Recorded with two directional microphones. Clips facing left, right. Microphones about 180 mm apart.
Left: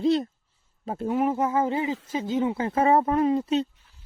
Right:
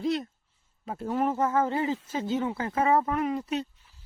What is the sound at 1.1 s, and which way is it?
Speech, 10° left (ahead or behind).